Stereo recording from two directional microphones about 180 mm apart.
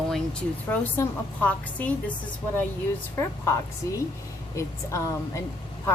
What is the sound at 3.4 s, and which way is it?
A woman's voice, 15° left (ahead or behind).